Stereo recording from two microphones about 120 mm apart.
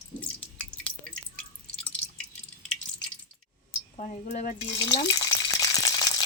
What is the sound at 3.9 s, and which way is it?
Speech, 85° left.